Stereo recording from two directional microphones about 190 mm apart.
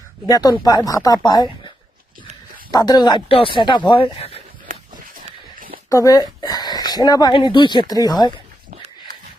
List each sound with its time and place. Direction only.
0.3 s speech: 20° left (ahead or behind)
2.7 s speech: 20° left (ahead or behind)
4.7 s a sound: 45° right (ahead or behind)
5.9 s speech: 15° left (ahead or behind)